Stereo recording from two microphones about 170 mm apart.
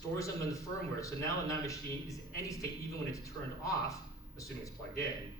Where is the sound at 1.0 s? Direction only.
20° left (ahead or behind).